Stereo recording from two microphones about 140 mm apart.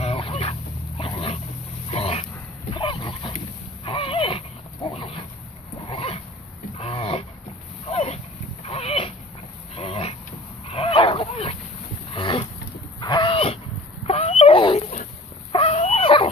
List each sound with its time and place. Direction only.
0.0 s dog: 45° left (ahead or behind)
3.8 s a sound: 40° left (ahead or behind)
4.9 s boat: 40° left (ahead or behind)
5.9 s a sound: 40° left (ahead or behind)
9.8 s vehicle: 45° left (ahead or behind)
10.7 s dog: 40° left (ahead or behind)
13.0 s livestock: 35° left (ahead or behind)
14.0 s a sound: 45° left (ahead or behind)
15.5 s dog: 45° left (ahead or behind)